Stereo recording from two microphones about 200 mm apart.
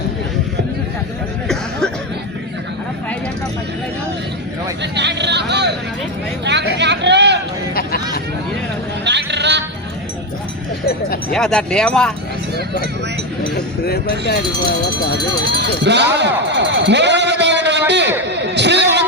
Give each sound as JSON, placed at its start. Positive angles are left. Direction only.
{"t": 4.8, "sound": "vehicle", "side_deg": -60}
{"t": 6.4, "sound": "a sound", "side_deg": -60}
{"t": 9.0, "sound": "sheep", "side_deg": -60}
{"t": 11.3, "sound": "speech", "side_deg": 5}
{"t": 13.8, "sound": "speech", "side_deg": 50}
{"t": 15.8, "sound": "speech", "side_deg": -60}
{"t": 16.6, "sound": "a sound", "side_deg": -60}